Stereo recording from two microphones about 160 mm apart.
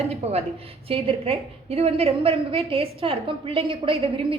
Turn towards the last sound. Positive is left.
turn(degrees=-35)  # may be behind; listen again after turning